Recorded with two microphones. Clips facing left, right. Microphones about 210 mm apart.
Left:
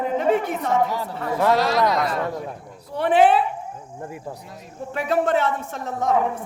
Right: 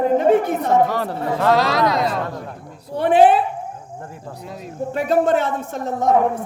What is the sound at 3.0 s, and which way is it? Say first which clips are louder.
Speech: right 3 dB; 40° right (ahead or behind).